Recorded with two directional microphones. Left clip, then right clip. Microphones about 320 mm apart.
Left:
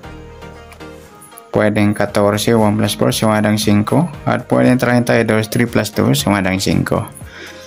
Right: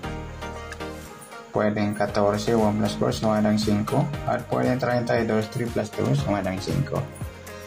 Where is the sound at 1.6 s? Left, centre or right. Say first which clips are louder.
Left 9 dB; left.